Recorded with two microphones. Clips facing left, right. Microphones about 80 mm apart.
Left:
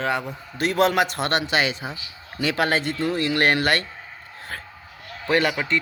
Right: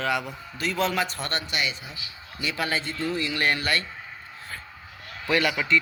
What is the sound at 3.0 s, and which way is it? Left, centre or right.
Speech, left.